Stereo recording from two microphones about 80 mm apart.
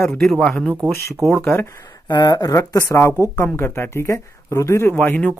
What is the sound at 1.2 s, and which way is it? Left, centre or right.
Speech, right.